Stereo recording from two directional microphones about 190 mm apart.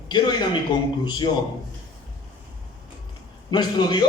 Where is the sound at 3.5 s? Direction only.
20° left (ahead or behind).